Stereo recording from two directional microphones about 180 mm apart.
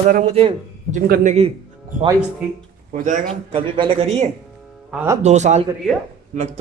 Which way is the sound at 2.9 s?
40° right (ahead or behind).